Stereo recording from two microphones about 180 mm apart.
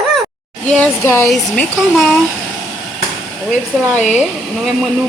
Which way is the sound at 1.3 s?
Centre (ahead or behind).